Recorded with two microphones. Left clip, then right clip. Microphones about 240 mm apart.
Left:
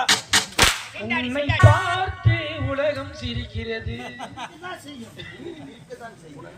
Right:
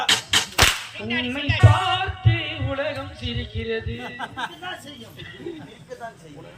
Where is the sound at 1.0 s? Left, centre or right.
Centre.